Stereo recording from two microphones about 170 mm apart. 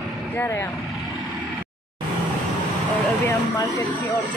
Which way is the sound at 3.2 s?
20° left (ahead or behind).